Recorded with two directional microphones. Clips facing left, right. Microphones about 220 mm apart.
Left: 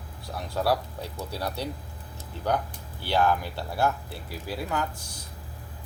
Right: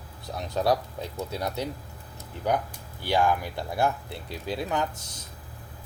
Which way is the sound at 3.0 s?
15° right (ahead or behind).